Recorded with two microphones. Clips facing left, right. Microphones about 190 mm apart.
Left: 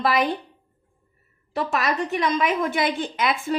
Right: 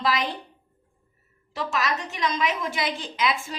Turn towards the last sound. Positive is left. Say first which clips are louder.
# left 4 dB
turn(degrees=55)  # may be behind; listen again after turning